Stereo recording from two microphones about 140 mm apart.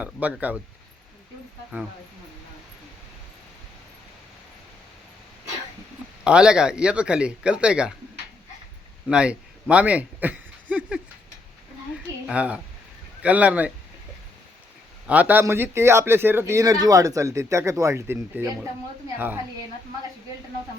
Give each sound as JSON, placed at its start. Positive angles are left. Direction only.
{"t": 0.0, "sound": "speech", "side_deg": -10}
{"t": 6.2, "sound": "speech", "side_deg": -5}
{"t": 9.0, "sound": "a sound", "side_deg": -5}
{"t": 12.3, "sound": "speech", "side_deg": -10}
{"t": 15.0, "sound": "a man's voice", "side_deg": -10}